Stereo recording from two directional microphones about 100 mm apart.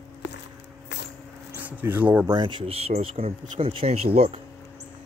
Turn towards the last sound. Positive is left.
turn(degrees=-85)